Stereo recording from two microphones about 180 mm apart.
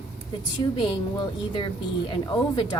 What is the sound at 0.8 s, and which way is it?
A woman's voice, 25° left (ahead or behind).